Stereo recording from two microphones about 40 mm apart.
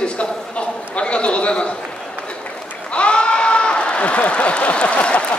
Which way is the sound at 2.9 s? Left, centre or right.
Left.